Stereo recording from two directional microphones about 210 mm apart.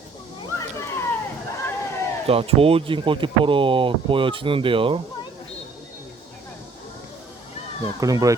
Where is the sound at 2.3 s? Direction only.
25° right (ahead or behind).